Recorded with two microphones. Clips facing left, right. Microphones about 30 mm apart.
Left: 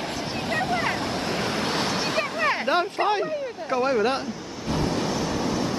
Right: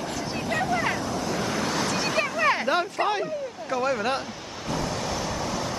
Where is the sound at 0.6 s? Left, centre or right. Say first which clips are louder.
Even; left.